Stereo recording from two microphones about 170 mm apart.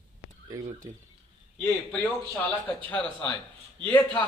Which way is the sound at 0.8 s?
20° right (ahead or behind).